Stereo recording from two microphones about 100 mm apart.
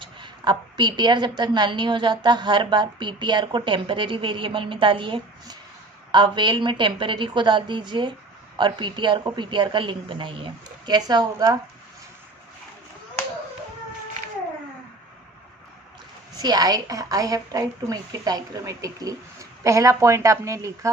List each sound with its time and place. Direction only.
0.0 s a woman's voice: 50° right (ahead or behind)
10.9 s a woman's voice: 45° right (ahead or behind)
16.4 s a woman's voice: 45° right (ahead or behind)